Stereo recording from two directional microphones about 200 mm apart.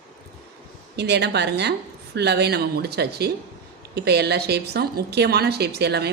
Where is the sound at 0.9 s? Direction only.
55° right (ahead or behind).